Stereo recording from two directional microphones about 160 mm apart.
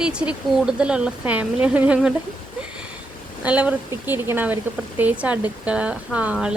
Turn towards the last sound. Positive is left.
turn(degrees=-5)  # may be behind; listen again after turning